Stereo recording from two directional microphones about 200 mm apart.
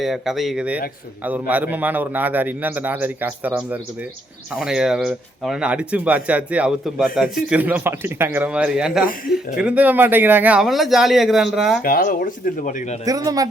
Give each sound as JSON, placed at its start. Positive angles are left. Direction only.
{"t": 0.0, "sound": "a man's voice", "side_deg": 0}
{"t": 11.8, "sound": "speech", "side_deg": 45}
{"t": 13.1, "sound": "a man's voice", "side_deg": -15}